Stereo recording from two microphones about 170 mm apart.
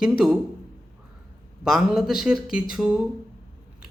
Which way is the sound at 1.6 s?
5° right (ahead or behind).